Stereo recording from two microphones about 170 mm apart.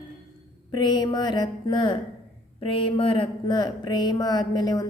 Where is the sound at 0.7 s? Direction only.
25° left (ahead or behind).